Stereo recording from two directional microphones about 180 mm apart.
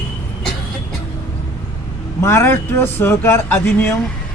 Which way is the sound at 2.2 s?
15° left (ahead or behind).